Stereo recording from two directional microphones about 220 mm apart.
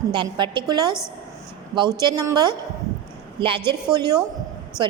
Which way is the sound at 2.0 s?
15° right (ahead or behind).